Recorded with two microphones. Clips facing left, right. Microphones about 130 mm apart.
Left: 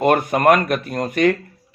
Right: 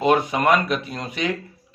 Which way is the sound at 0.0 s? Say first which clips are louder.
Left 3 dB; 50° left (ahead or behind).